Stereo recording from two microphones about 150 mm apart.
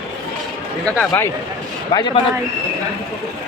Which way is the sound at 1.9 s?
25° left (ahead or behind).